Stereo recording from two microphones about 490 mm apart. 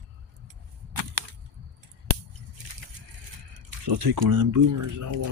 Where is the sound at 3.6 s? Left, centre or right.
Right.